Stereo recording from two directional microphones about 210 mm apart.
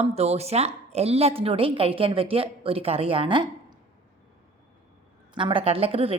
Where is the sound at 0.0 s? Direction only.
30° right (ahead or behind).